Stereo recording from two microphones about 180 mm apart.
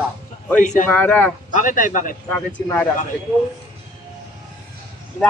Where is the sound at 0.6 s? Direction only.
45° left (ahead or behind).